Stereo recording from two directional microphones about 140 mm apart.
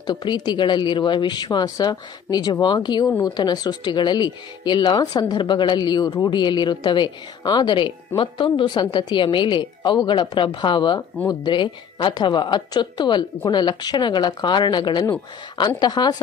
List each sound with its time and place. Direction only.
0.0 s speech: 30° left (ahead or behind)